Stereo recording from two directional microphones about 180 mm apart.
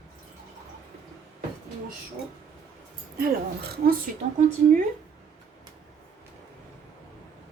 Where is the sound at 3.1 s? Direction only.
55° right (ahead or behind).